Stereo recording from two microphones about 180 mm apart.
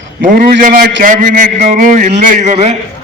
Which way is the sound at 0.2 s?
50° right (ahead or behind).